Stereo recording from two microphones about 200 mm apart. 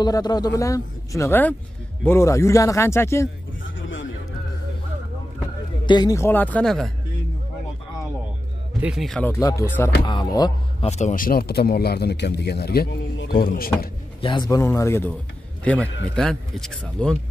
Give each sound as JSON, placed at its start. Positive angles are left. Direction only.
{"t": 0.0, "sound": "a man's voice", "side_deg": 20}
{"t": 3.6, "sound": "a sound", "side_deg": 70}
{"t": 5.9, "sound": "a man's voice", "side_deg": 20}
{"t": 8.8, "sound": "a man's voice", "side_deg": 0}
{"t": 9.3, "sound": "a man's voice", "side_deg": 15}
{"t": 10.9, "sound": "a man's voice", "side_deg": 35}
{"t": 14.2, "sound": "a man's voice", "side_deg": 20}